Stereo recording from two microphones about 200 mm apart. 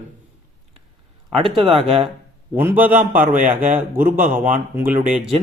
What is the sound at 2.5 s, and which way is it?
A man's voice, 10° right (ahead or behind).